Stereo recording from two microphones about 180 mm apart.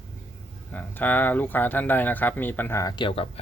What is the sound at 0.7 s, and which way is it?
Speech, 10° left (ahead or behind).